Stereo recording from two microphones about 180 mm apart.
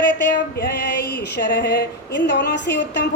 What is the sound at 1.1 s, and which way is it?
Speech, 70° left (ahead or behind).